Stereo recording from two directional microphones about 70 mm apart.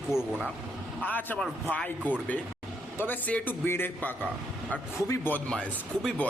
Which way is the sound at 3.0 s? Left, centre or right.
Left.